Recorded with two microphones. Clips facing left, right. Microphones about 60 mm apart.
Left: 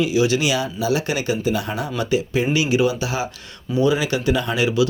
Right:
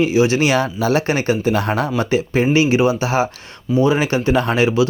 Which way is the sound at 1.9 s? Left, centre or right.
Right.